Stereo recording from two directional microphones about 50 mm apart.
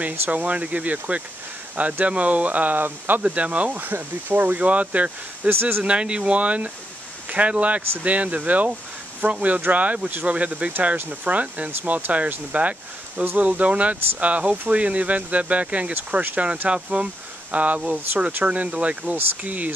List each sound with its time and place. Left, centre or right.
0.3 s speech: right
3.2 s speech: right
5.5 s speech: right
5.9 s speech: right
15.9 s speech: right
16.6 s speech: right
18.2 s speech: right